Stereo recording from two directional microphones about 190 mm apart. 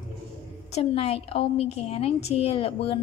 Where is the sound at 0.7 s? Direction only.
30° left (ahead or behind).